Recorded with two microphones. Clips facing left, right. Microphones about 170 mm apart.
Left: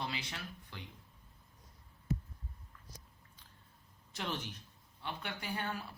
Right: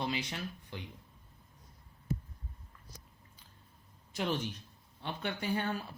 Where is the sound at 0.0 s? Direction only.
20° right (ahead or behind).